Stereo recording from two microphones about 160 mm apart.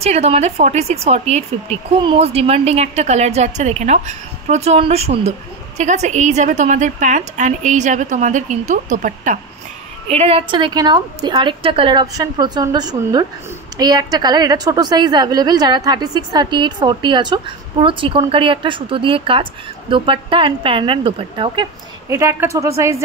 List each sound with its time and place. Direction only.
0.0 s a woman's voice: 40° right (ahead or behind)
10.0 s a woman's voice: 40° right (ahead or behind)
22.1 s a woman's voice: 20° right (ahead or behind)